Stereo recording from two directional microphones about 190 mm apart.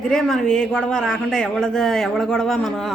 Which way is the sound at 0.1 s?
Centre (ahead or behind).